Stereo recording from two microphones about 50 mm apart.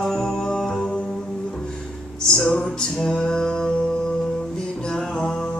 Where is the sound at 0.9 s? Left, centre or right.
Centre.